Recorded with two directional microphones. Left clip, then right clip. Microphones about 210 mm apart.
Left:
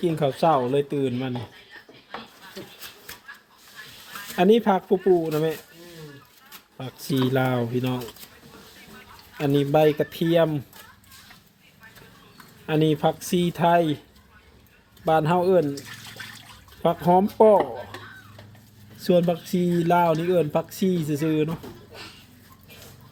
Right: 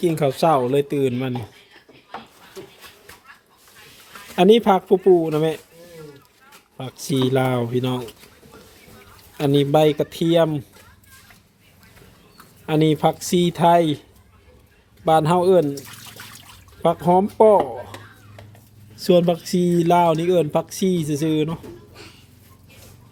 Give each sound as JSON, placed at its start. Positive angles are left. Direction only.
{"t": 0.0, "sound": "speech", "side_deg": -15}
{"t": 4.4, "sound": "speech", "side_deg": -20}
{"t": 6.7, "sound": "speech", "side_deg": -15}
{"t": 9.4, "sound": "speech", "side_deg": -20}
{"t": 12.6, "sound": "speech", "side_deg": -15}
{"t": 15.0, "sound": "speech", "side_deg": -15}
{"t": 16.8, "sound": "speech", "side_deg": -10}
{"t": 18.9, "sound": "speech", "side_deg": -15}